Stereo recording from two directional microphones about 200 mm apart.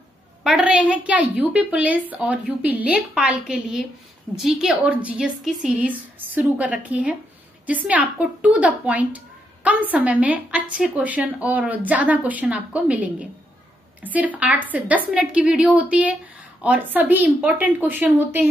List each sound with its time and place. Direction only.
0.4 s a woman's voice: 5° right (ahead or behind)